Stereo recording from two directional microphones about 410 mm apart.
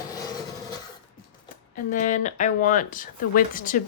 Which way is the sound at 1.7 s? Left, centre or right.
Centre.